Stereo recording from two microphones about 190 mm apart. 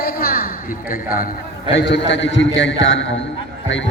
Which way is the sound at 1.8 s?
70° left (ahead or behind).